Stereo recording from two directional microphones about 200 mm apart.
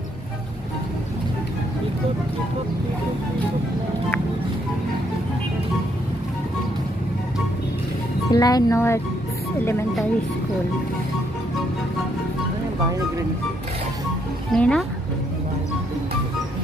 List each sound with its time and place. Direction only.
8.3 s speech: 20° left (ahead or behind)
14.5 s speech: 5° left (ahead or behind)